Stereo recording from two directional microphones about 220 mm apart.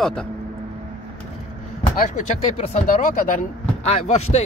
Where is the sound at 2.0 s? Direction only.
35° left (ahead or behind).